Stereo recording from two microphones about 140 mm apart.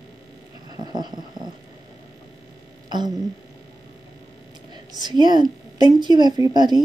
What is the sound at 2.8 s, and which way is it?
Speech, 30° right (ahead or behind).